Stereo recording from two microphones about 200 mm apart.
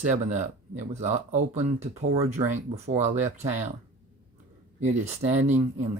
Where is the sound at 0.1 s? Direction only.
35° right (ahead or behind).